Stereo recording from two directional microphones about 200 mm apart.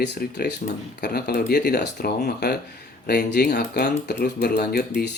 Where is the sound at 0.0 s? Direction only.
55° left (ahead or behind).